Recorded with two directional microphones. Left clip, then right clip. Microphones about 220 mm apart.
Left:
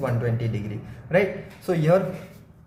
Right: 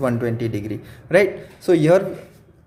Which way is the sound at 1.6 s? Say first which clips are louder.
Right 6 dB; 35° right (ahead or behind).